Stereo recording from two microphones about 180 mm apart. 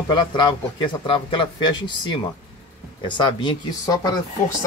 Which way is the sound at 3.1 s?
25° left (ahead or behind).